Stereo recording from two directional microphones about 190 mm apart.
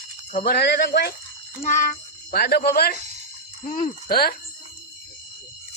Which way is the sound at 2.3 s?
55° left (ahead or behind).